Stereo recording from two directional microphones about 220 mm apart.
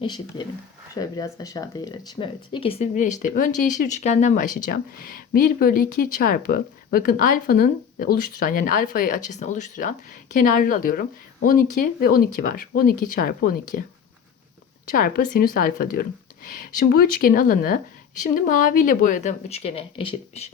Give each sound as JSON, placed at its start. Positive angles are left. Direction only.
{"t": 0.0, "sound": "speech", "side_deg": 20}
{"t": 14.8, "sound": "speech", "side_deg": 40}